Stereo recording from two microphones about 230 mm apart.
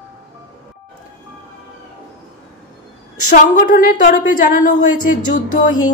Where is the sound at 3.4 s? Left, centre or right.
Left.